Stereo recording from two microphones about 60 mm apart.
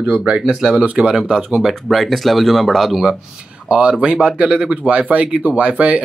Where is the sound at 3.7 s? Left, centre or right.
Centre.